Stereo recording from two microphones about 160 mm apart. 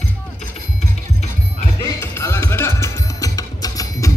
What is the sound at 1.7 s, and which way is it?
Music, 20° left (ahead or behind).